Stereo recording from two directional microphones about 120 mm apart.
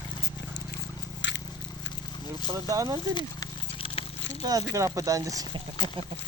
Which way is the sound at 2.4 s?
30° right (ahead or behind).